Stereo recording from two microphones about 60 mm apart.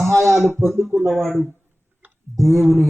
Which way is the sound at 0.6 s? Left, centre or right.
Right.